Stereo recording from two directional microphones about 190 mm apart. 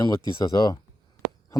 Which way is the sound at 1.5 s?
15° left (ahead or behind).